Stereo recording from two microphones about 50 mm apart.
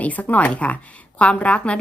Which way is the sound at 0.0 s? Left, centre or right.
Left.